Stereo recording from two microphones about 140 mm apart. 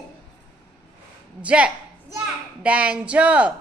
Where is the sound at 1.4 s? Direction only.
10° right (ahead or behind).